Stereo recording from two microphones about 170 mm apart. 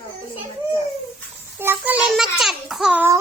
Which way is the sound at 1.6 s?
10° right (ahead or behind).